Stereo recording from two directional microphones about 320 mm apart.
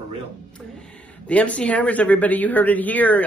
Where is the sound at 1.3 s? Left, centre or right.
Centre.